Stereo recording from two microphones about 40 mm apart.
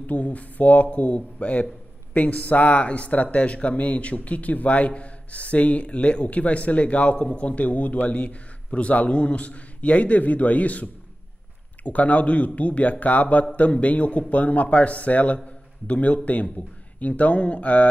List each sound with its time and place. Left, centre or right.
0.0 s a man's voice: left